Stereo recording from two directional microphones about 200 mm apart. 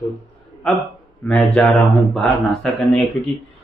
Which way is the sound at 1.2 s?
5° left (ahead or behind).